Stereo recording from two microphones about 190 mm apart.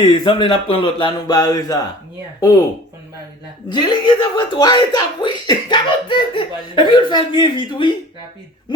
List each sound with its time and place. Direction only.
0.0 s speech: 25° left (ahead or behind)
3.7 s speech: 25° left (ahead or behind)